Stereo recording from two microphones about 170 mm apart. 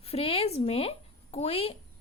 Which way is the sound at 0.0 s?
35° left (ahead or behind).